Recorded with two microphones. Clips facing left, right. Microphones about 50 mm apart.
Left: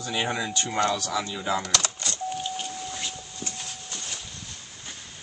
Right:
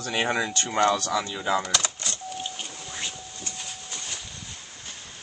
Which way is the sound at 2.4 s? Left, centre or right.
Centre.